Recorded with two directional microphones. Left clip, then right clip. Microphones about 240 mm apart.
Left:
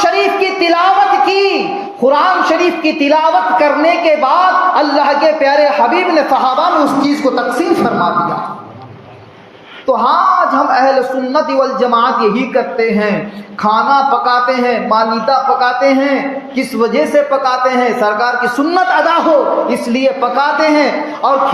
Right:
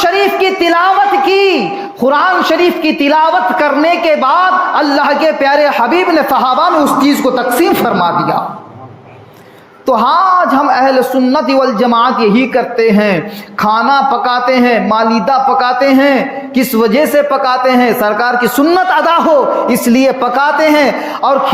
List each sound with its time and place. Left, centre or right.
0.0 s a sound: right
2.0 s speech: right
9.8 s speech: right